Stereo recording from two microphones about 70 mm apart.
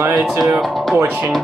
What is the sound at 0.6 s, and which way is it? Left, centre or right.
Speech, centre.